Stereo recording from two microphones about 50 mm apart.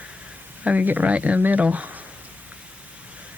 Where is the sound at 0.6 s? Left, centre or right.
Right.